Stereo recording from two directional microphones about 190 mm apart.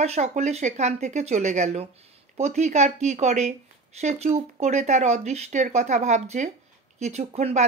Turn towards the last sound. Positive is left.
turn(degrees=-35)  # may be behind; listen again after turning